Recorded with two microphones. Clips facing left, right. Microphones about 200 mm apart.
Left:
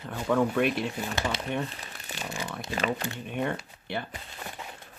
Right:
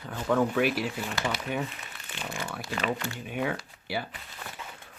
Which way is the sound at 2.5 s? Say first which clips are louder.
Left 1 dB; 20° left (ahead or behind).